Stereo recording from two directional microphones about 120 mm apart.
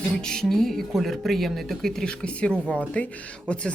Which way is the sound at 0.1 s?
5° left (ahead or behind).